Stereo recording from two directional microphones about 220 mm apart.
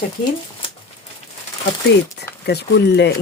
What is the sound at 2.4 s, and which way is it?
Speech, 50° left (ahead or behind).